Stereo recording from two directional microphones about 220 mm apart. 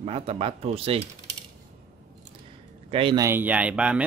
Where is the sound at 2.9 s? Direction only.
25° right (ahead or behind).